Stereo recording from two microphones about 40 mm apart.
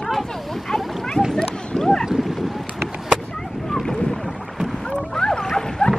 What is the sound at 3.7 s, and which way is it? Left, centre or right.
Boat, centre.